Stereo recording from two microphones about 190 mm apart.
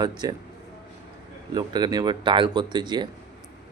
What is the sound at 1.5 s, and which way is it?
Speech, 20° right (ahead or behind).